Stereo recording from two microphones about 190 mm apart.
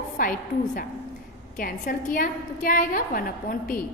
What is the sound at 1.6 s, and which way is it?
A woman's voice, 45° left (ahead or behind).